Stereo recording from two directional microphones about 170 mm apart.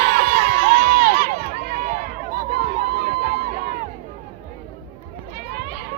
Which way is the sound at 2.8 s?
70° right (ahead or behind).